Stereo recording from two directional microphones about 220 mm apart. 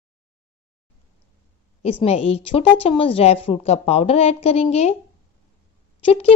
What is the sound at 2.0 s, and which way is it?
A woman's voice, 25° left (ahead or behind).